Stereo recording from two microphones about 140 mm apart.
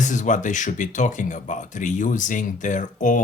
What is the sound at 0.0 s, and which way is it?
Speech, 60° left (ahead or behind).